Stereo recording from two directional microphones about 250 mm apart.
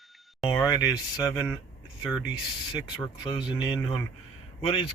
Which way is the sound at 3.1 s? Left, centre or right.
Centre.